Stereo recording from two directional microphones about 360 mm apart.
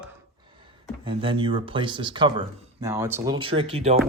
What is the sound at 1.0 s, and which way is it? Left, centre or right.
Speech, centre.